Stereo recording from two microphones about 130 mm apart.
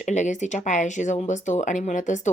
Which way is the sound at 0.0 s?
65° left (ahead or behind).